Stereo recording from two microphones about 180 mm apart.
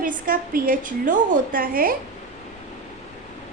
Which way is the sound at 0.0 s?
50° right (ahead or behind).